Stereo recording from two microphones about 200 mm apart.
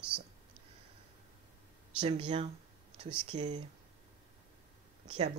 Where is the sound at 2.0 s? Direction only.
25° right (ahead or behind).